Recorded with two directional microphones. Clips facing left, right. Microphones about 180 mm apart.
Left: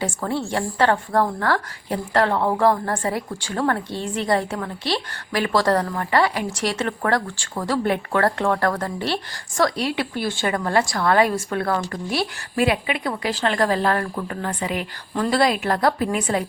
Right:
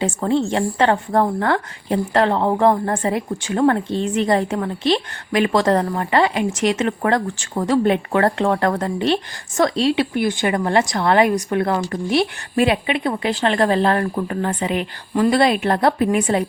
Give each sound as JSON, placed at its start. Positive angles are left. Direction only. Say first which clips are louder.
{"t": 0.0, "sound": "a woman's voice", "louder": "right 6 dB", "side_deg": -20}